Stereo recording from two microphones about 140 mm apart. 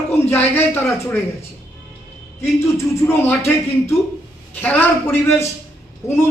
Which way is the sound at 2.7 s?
15° left (ahead or behind).